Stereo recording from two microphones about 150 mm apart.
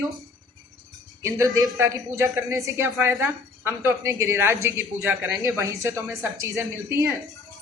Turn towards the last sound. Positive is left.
turn(degrees=-20)  # may be behind; listen again after turning